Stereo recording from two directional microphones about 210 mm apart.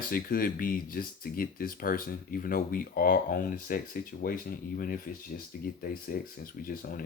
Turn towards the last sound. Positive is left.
turn(degrees=40)  # may be behind; listen again after turning